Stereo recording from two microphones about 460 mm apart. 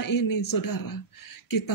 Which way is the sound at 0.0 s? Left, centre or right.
Left.